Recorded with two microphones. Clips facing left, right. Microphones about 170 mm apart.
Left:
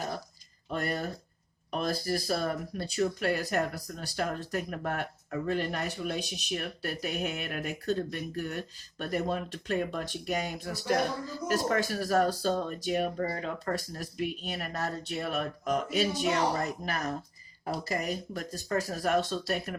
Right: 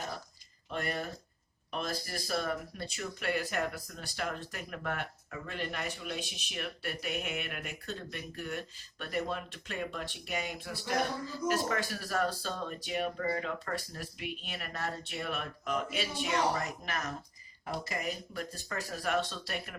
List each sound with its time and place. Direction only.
0.7 s speech: 40° left (ahead or behind)